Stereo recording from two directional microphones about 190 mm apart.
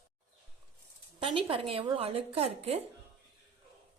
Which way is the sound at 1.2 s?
30° right (ahead or behind).